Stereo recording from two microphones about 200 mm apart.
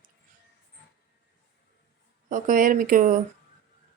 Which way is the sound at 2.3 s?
40° right (ahead or behind).